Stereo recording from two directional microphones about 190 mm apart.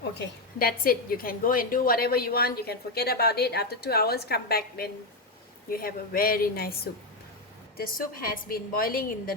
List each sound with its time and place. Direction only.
0.0 s a woman's voice: 55° left (ahead or behind)
7.8 s a woman's voice: 50° left (ahead or behind)